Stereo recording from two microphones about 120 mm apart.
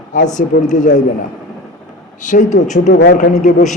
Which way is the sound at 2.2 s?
90° left.